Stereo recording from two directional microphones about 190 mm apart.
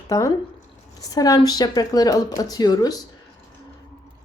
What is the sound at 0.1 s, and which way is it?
A woman's voice, 15° left (ahead or behind).